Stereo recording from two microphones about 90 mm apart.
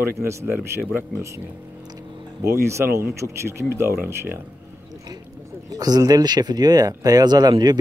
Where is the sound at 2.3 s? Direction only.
30° right (ahead or behind).